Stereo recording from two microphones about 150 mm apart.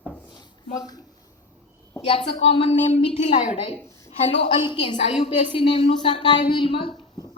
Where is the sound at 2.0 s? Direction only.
40° left (ahead or behind).